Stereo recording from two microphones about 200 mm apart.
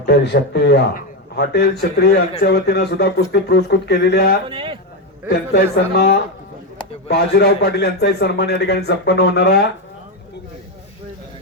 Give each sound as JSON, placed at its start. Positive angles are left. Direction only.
{"t": 0.0, "sound": "a man's voice", "side_deg": 60}
{"t": 4.4, "sound": "speech", "side_deg": -25}
{"t": 5.3, "sound": "a man's voice", "side_deg": 55}